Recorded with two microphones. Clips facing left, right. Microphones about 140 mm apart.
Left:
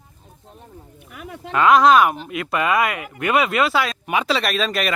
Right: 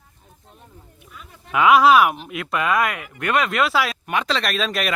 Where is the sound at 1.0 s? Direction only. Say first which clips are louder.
Left 11 dB; 75° left (ahead or behind).